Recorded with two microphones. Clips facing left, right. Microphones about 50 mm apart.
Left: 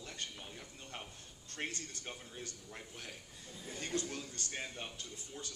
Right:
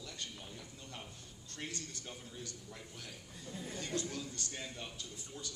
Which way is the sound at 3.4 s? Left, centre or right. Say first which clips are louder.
Right 8 dB; right.